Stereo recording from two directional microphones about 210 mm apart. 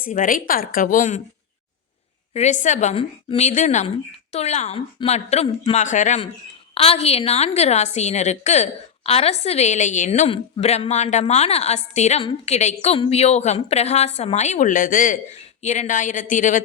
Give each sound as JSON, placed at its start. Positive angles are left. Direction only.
{"t": 0.1, "sound": "a woman's voice", "side_deg": 40}
{"t": 2.3, "sound": "a woman's voice", "side_deg": 35}